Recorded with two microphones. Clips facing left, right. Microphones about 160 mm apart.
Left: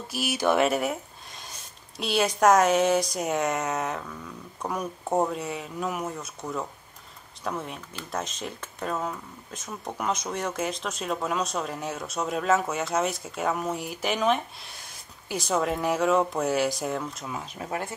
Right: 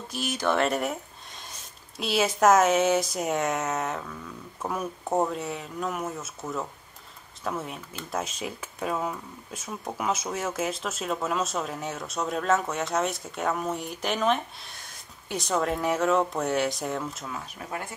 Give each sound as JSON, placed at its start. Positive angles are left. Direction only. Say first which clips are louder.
{"t": 0.1, "sound": "speech", "louder": "left 2 dB", "side_deg": 10}
{"t": 17.3, "sound": "speech", "louder": "left 3 dB", "side_deg": 20}